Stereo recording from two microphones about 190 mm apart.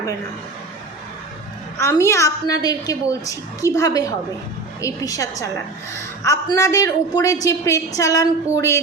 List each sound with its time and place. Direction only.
1.8 s a woman's voice: 15° left (ahead or behind)